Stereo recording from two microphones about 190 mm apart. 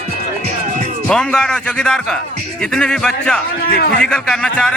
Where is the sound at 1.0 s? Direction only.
5° left (ahead or behind).